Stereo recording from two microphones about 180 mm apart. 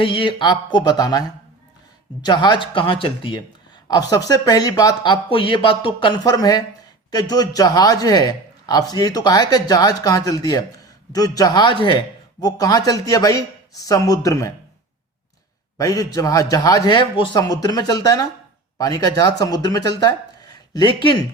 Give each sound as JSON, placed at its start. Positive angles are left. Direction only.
{"t": 0.0, "sound": "a man's voice", "side_deg": 30}
{"t": 2.2, "sound": "a man's voice", "side_deg": 25}
{"t": 15.8, "sound": "a man's voice", "side_deg": 20}